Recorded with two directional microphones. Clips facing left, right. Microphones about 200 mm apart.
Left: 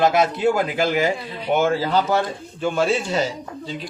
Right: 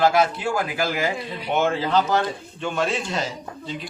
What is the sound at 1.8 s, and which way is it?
A man's voice, 10° left (ahead or behind).